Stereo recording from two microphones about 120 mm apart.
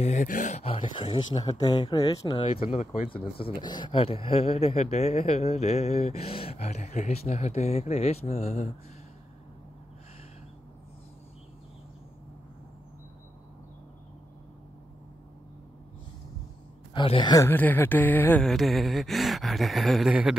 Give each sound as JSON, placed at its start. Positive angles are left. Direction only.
{"t": 0.0, "sound": "speech", "side_deg": 85}
{"t": 0.7, "sound": "speech", "side_deg": 50}
{"t": 1.4, "sound": "speech", "side_deg": 35}
{"t": 2.3, "sound": "speech", "side_deg": 50}
{"t": 16.9, "sound": "speech", "side_deg": 45}
{"t": 17.5, "sound": "speech", "side_deg": 15}
{"t": 18.4, "sound": "speech", "side_deg": 0}